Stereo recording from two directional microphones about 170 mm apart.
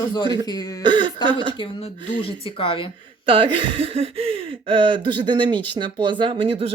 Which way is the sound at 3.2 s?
30° right (ahead or behind).